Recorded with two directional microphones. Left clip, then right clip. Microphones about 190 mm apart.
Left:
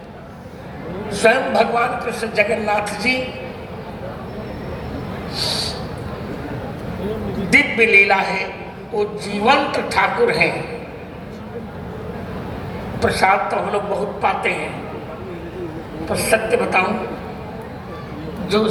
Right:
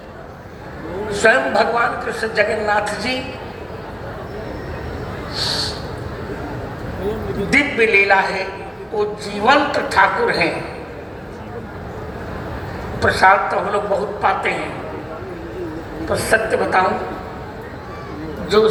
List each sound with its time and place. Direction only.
1.1 s a man's voice: 20° left (ahead or behind)
5.3 s a sound: 20° left (ahead or behind)
7.5 s a man's voice: 25° left (ahead or behind)
13.0 s a man's voice: 25° left (ahead or behind)
16.0 s a man's voice: 20° left (ahead or behind)
18.4 s speech: 20° left (ahead or behind)